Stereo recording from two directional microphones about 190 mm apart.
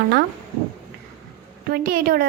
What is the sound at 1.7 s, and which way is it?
Speech, 50° right (ahead or behind).